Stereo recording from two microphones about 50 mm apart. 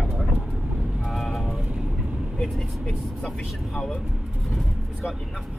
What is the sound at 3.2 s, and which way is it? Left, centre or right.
Speech, centre.